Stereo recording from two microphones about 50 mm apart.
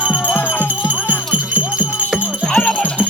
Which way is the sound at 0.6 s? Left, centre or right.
Right.